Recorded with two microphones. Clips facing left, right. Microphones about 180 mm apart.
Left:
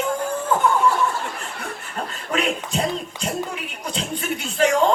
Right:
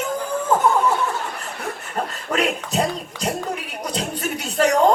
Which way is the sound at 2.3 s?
40° right (ahead or behind).